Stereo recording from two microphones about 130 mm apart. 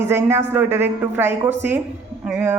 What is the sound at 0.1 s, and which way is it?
A woman's voice, 20° right (ahead or behind).